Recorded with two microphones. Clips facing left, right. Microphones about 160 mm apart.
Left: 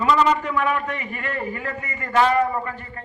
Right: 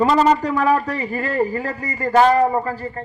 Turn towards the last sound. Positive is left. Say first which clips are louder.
# right 6 dB
turn(degrees=-35)  # may be behind; listen again after turning